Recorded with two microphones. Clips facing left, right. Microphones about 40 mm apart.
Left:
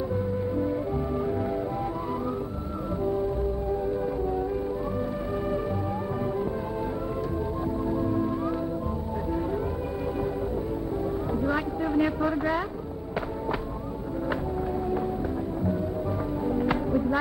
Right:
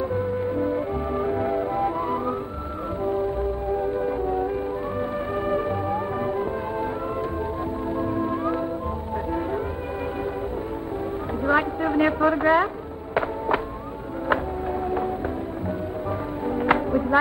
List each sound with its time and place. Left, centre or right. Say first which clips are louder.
0.1 s music: right 3 dB; right
7.9 s music: right 3 dB; right
11.4 s a sound: right 9 dB; right
16.4 s music: right 5 dB; right